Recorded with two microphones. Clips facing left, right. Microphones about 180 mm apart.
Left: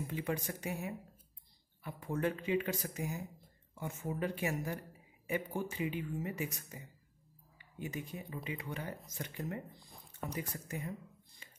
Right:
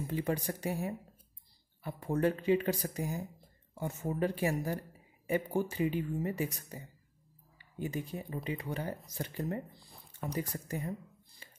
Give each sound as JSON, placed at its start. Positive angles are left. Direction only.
{"t": 0.0, "sound": "speech", "side_deg": -35}
{"t": 7.8, "sound": "speech", "side_deg": -35}
{"t": 9.7, "sound": "a sound", "side_deg": 0}
{"t": 10.5, "sound": "speech", "side_deg": -35}